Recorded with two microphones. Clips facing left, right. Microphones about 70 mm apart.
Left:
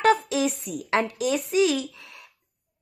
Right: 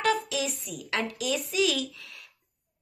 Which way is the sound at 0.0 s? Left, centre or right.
Left.